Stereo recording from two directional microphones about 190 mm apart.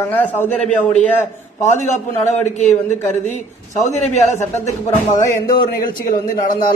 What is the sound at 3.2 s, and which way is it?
Speech, 40° left (ahead or behind).